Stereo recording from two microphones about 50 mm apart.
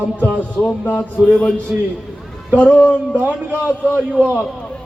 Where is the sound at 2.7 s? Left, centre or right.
Left.